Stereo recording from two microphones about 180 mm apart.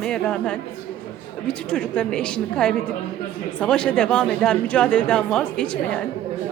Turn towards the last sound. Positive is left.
turn(degrees=5)  # may be behind; listen again after turning